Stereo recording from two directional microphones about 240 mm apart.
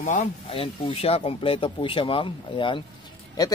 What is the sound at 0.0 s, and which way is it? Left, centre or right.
A man's voice, left.